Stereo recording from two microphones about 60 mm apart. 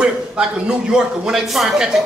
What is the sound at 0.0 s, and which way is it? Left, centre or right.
A man's voice, centre.